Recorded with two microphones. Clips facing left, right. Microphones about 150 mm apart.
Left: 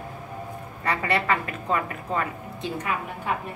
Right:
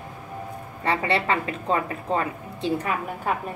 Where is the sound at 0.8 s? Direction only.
25° right (ahead or behind).